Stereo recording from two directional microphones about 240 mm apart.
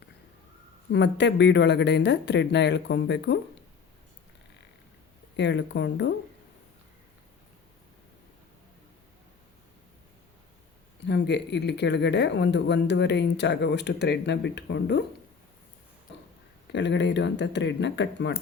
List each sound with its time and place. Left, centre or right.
0.9 s speech: left
5.4 s speech: left
11.0 s speech: left
16.7 s speech: left